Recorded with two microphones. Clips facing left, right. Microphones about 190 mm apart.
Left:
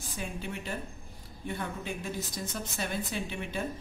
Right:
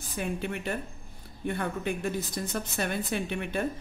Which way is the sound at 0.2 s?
60° right (ahead or behind).